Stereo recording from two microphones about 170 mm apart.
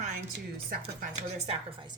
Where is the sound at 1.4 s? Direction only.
35° right (ahead or behind).